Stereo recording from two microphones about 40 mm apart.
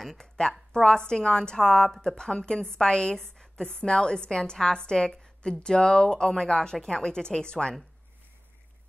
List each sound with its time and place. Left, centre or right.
0.0 s speech: centre
0.4 s a woman's voice: left